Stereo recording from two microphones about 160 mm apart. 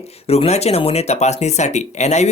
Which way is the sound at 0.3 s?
40° left (ahead or behind).